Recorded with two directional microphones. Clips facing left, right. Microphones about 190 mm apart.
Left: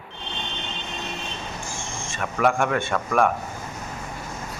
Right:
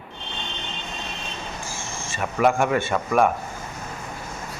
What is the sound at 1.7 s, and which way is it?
Speech, 5° right (ahead or behind).